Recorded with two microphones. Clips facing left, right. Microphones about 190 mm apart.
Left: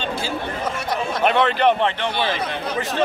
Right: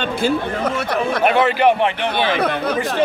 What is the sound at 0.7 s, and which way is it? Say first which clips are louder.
Speech: right 4 dB; 60° right (ahead or behind).